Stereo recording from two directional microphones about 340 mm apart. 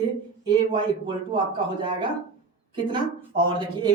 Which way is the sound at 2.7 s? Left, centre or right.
Centre.